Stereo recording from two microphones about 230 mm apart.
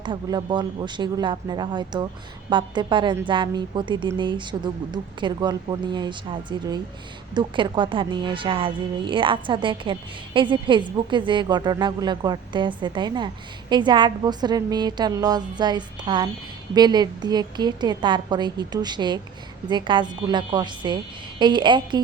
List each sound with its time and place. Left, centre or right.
0.0 s a woman's voice: centre